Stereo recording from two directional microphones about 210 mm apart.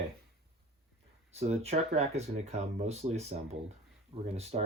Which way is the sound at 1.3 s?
30° right (ahead or behind).